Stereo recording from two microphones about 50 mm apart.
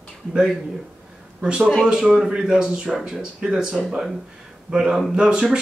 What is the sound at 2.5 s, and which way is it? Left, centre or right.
Speech, centre.